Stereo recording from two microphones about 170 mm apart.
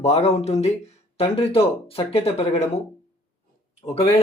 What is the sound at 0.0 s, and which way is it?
Speech, 40° left (ahead or behind).